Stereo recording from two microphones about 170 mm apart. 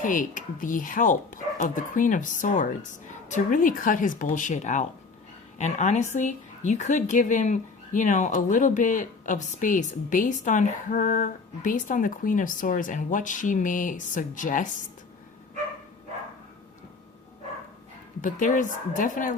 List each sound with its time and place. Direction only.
0.0 s a woman's voice: 50° left (ahead or behind)
18.2 s a woman's voice: 50° left (ahead or behind)